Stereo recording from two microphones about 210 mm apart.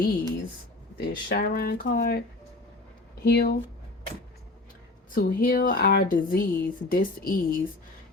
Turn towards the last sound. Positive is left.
turn(degrees=45)  # may be behind; listen again after turning